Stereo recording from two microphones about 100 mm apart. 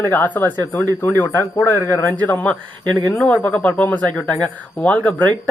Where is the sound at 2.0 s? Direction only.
20° left (ahead or behind).